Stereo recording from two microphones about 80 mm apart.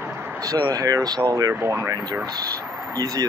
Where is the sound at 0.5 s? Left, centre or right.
Right.